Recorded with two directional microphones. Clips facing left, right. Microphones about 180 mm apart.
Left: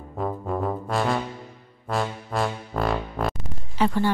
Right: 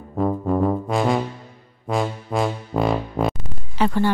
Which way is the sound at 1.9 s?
Centre (ahead or behind).